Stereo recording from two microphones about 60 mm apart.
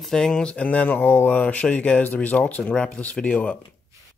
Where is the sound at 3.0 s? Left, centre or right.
Left.